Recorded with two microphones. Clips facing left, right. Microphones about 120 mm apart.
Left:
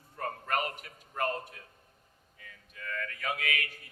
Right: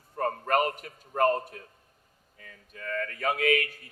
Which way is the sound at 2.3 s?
40° right (ahead or behind).